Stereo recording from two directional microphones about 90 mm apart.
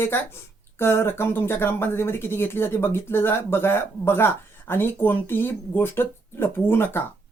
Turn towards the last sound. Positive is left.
turn(degrees=25)  # may be behind; listen again after turning